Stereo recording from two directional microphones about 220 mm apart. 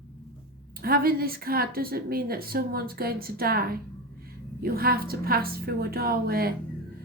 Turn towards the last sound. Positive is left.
turn(degrees=-45)  # may be behind; listen again after turning